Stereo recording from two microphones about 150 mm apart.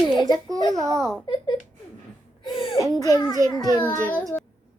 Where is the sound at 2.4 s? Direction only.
35° left (ahead or behind).